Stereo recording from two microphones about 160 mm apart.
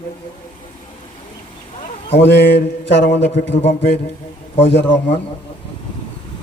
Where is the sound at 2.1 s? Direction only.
90° left.